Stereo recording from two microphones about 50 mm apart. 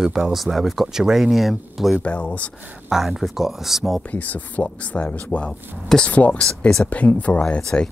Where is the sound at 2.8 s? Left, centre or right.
Centre.